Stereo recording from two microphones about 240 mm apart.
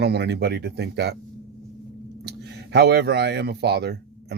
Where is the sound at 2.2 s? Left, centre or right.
Right.